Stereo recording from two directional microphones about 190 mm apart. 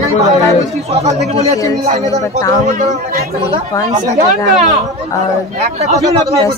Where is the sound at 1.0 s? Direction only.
35° right (ahead or behind).